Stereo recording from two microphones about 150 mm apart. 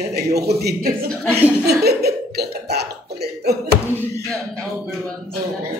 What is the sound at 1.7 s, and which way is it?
Cough, 90° right.